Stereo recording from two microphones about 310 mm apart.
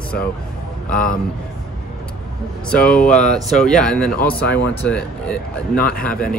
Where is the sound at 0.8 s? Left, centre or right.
Left.